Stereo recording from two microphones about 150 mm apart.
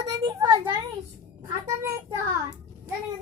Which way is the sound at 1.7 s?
20° right (ahead or behind).